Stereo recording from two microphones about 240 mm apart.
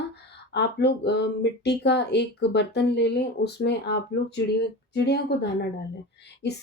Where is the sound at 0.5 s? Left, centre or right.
Left.